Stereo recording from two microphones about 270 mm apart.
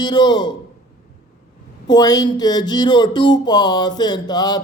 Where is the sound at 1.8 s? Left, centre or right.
Centre.